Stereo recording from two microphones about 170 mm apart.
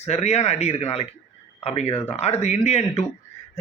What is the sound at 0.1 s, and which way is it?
Speech, 40° left (ahead or behind).